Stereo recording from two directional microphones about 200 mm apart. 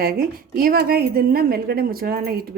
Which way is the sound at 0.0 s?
50° right (ahead or behind).